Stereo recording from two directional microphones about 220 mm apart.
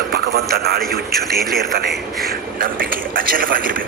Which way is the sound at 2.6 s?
40° right (ahead or behind).